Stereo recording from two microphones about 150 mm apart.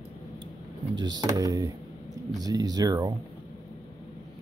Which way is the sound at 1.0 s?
25° right (ahead or behind).